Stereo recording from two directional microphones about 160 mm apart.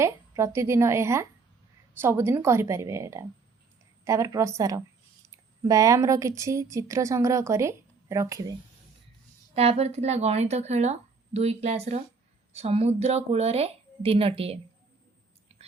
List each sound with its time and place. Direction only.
0.0 s a woman's voice: 15° right (ahead or behind)
9.6 s a woman's voice: 40° right (ahead or behind)